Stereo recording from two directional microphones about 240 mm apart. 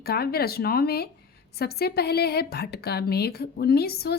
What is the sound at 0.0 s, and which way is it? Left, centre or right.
A woman's voice, left.